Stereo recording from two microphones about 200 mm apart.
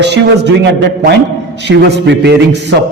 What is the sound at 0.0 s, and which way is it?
A man's voice, 60° right (ahead or behind).